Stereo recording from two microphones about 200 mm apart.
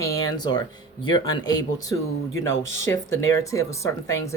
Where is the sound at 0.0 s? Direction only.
20° left (ahead or behind).